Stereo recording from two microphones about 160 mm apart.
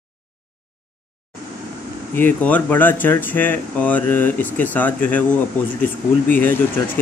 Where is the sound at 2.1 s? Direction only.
10° left (ahead or behind).